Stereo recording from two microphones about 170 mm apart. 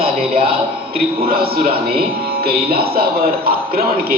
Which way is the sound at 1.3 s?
65° right (ahead or behind).